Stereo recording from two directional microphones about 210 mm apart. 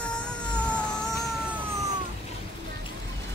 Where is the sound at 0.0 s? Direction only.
5° left (ahead or behind).